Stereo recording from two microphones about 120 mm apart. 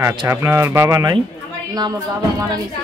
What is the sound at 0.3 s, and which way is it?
Speech, 25° right (ahead or behind).